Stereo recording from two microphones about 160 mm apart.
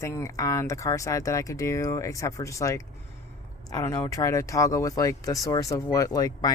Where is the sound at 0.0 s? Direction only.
15° left (ahead or behind).